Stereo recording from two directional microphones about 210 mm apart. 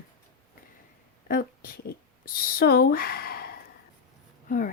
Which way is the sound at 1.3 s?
40° left (ahead or behind).